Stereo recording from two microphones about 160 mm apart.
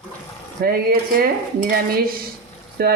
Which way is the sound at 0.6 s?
70° right (ahead or behind).